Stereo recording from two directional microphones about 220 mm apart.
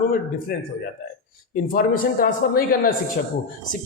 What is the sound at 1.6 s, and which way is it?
A man's voice, 40° left (ahead or behind).